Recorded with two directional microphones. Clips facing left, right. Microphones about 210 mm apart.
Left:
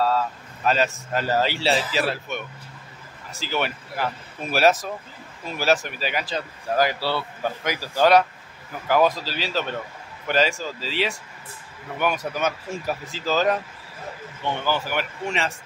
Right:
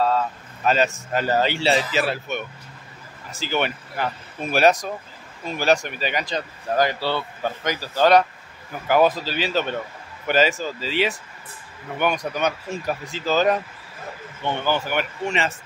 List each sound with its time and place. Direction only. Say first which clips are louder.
0.7 s speech: right 2 dB; centre (ahead or behind)
8.8 s speech: right 2 dB; 5° right (ahead or behind)
14.4 s speech: right 2 dB; 25° right (ahead or behind)
14.7 s speech: right 3 dB; centre (ahead or behind)